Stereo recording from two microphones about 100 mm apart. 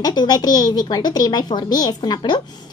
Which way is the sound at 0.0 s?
45° left (ahead or behind).